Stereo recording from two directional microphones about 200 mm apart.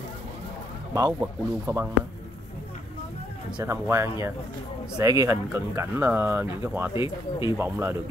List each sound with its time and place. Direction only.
0.9 s speech: 15° right (ahead or behind)
3.5 s speech: 15° right (ahead or behind)
6.9 s speech: 25° left (ahead or behind)
7.5 s speech: 10° right (ahead or behind)